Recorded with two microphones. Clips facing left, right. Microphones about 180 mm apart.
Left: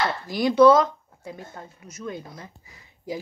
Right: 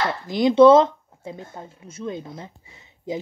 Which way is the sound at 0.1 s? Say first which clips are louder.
Right 4 dB; 20° right (ahead or behind).